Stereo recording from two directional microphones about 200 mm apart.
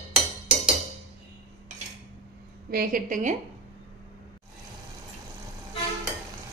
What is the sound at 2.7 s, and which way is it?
Speech, 45° right (ahead or behind).